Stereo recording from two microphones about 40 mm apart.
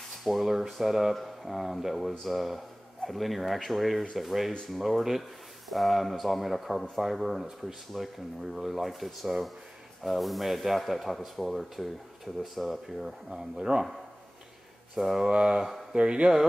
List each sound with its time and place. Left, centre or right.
0.1 s speech: centre
13.6 s speech: centre
15.0 s speech: centre
15.2 s speech: right